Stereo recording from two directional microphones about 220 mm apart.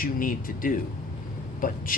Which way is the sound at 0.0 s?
40° left (ahead or behind).